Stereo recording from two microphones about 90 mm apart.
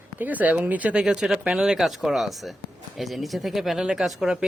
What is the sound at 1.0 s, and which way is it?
Speech, 5° right (ahead or behind).